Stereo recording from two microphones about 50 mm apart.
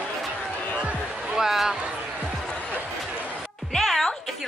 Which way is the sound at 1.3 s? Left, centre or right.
Centre.